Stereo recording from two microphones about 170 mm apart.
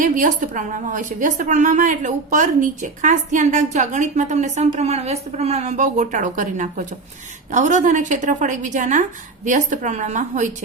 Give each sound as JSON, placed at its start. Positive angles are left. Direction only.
{"t": 0.0, "sound": "a woman's voice", "side_deg": -50}